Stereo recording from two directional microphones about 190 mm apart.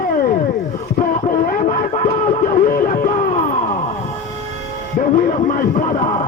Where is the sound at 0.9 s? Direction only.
40° left (ahead or behind).